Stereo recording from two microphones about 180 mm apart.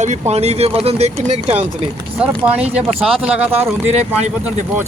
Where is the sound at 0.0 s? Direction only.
40° right (ahead or behind).